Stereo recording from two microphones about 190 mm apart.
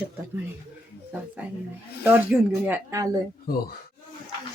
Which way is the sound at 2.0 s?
10° right (ahead or behind).